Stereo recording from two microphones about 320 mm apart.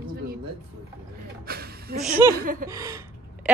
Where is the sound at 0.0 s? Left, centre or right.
Right.